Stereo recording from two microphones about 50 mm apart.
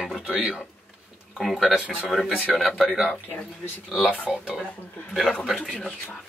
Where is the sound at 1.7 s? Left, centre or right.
Centre.